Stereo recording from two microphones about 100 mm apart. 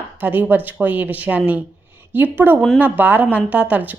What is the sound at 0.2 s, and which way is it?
A woman's voice, 20° right (ahead or behind).